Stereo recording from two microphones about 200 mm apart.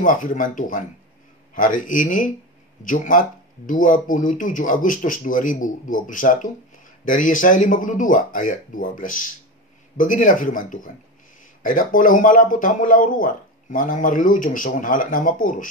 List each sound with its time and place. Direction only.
0.0 s speech: 40° left (ahead or behind)